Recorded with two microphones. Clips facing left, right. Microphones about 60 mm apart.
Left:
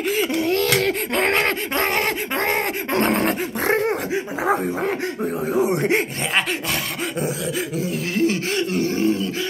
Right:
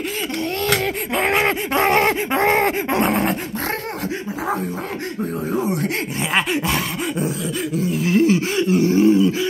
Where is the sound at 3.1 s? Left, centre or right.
Centre.